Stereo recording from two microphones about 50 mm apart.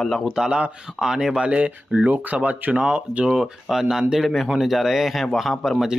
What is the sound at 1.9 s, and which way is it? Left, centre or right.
Speech, right.